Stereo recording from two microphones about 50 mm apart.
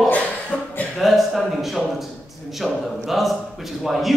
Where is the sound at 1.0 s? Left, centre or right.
Centre.